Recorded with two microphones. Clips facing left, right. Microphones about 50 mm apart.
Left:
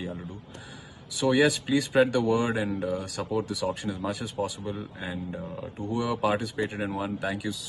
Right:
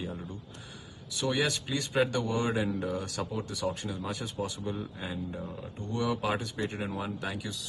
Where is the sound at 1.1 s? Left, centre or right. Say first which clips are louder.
Left 7 dB; centre.